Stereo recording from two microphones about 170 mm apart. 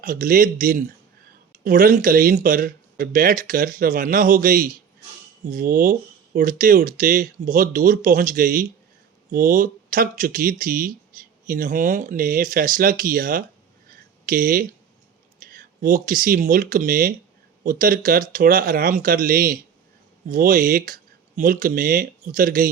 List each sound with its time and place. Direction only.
0.0 s speech: 55° right (ahead or behind)